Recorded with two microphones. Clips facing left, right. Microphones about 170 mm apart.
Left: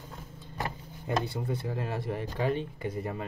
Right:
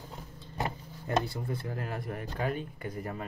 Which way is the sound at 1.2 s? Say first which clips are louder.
Left 3 dB; 25° left (ahead or behind).